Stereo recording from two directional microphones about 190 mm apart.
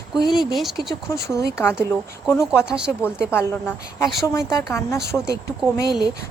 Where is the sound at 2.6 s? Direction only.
5° right (ahead or behind).